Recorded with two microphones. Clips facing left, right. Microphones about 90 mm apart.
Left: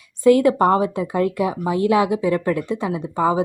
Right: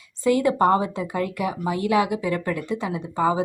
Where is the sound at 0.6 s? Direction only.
15° left (ahead or behind).